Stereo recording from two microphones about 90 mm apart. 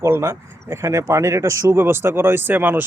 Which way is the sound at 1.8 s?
25° right (ahead or behind).